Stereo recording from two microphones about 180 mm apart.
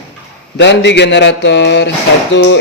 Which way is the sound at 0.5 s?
75° left (ahead or behind).